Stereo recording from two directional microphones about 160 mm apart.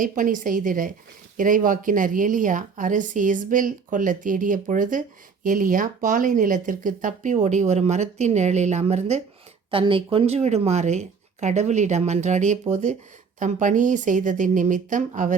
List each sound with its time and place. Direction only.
0.0 s a woman's voice: 55° right (ahead or behind)
9.6 s speech: 35° right (ahead or behind); by 15.4 s 50° right (ahead or behind)